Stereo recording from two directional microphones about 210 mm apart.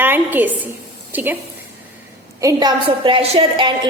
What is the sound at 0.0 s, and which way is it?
A woman's voice, 10° right (ahead or behind).